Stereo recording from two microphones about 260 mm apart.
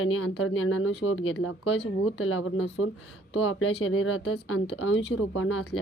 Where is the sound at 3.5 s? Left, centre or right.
Left.